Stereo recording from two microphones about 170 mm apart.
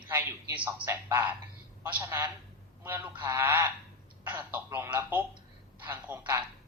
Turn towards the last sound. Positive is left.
turn(degrees=-10)  # may be behind; listen again after turning